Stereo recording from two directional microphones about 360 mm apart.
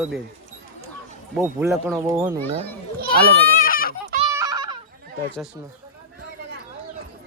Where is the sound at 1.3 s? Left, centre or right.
Centre.